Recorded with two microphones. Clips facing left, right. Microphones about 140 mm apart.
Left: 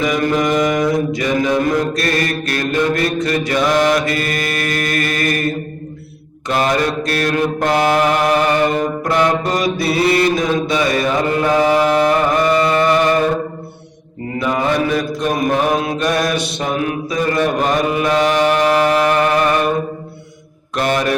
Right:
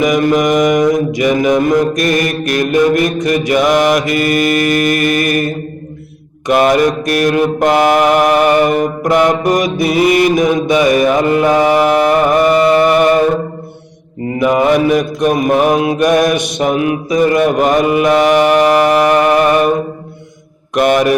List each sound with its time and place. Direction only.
0.0 s mantra: 15° right (ahead or behind)
6.5 s mantra: 15° right (ahead or behind)
14.3 s mantra: 15° right (ahead or behind)
20.7 s mantra: 15° right (ahead or behind)